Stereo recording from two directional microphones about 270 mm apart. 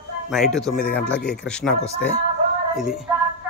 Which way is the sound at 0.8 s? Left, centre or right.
Left.